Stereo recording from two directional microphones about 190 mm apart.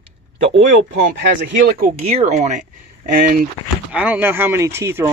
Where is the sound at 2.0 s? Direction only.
35° right (ahead or behind).